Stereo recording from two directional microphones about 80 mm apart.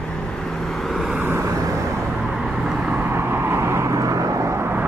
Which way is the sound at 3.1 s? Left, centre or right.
Right.